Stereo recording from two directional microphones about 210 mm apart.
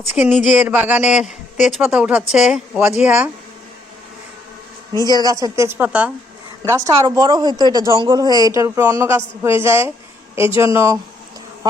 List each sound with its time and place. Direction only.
0.2 s speech: 5° right (ahead or behind)
5.1 s speech: 15° right (ahead or behind)